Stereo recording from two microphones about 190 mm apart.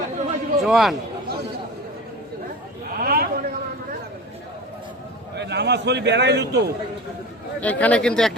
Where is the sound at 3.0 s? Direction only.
50° right (ahead or behind).